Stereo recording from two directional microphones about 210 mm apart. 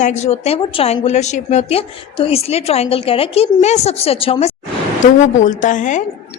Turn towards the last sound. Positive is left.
turn(degrees=35)  # may be behind; listen again after turning